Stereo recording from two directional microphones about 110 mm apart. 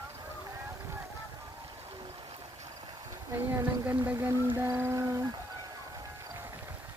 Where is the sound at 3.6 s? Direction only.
15° right (ahead or behind).